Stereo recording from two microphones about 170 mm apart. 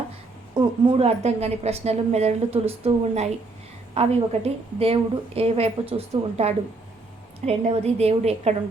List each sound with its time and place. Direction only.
0.5 s a woman's voice: 25° right (ahead or behind)